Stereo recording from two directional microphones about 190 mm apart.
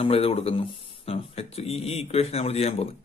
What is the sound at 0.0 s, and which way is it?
Speech, 30° left (ahead or behind).